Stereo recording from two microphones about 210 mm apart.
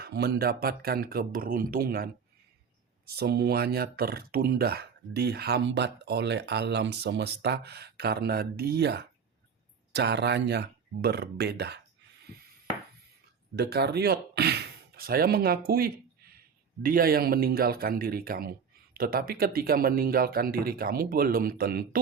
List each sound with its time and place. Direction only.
0.0 s speech: 50° right (ahead or behind)
3.1 s speech: 50° right (ahead or behind)
13.6 s speech: 50° right (ahead or behind)